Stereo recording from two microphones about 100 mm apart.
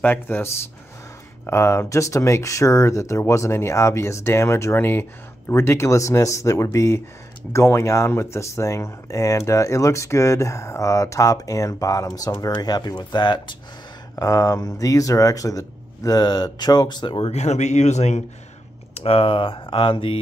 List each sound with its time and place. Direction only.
0.0 s speech: 20° left (ahead or behind); by 13.6 s 50° left (ahead or behind)
14.1 s speech: 35° left (ahead or behind); by 17.3 s 50° left (ahead or behind)
18.9 s speech: 70° left (ahead or behind)